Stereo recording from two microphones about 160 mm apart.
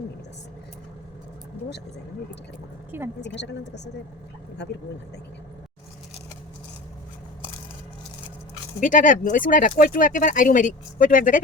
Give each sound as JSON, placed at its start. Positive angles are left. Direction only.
{"t": 2.9, "sound": "a woman's voice", "side_deg": -15}
{"t": 3.2, "sound": "a woman's voice", "side_deg": 90}
{"t": 8.8, "sound": "speech", "side_deg": 55}